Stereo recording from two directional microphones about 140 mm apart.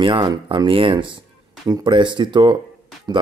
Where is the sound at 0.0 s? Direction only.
35° right (ahead or behind).